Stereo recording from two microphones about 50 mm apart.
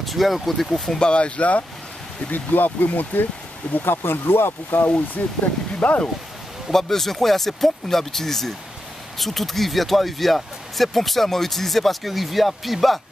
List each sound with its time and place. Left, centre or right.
0.0 s speech: centre
0.9 s speech: left
2.3 s speech: left
3.7 s speech: left
4.8 s speech: left
6.7 s speech: centre